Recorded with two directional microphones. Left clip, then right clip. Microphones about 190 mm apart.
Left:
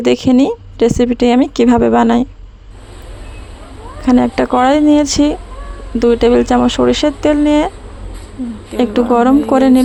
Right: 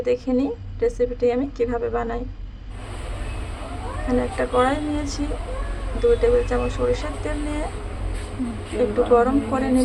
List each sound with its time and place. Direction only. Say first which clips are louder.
0.0 s speech: left 10 dB; 55° left (ahead or behind)
4.0 s speech: left 11 dB; 55° left (ahead or behind)
8.8 s speech: left 6 dB; 50° left (ahead or behind)